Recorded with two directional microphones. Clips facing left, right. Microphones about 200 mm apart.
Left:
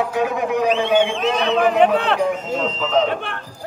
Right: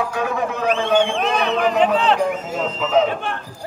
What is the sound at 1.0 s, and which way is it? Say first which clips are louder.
Speech: even; 55° right (ahead or behind).